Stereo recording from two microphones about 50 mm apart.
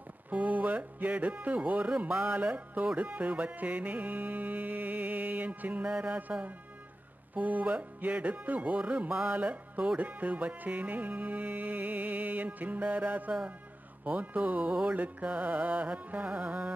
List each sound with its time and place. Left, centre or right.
0.3 s speech: right
3.0 s music: right
7.3 s music: right
14.0 s speech: right
15.0 s music: right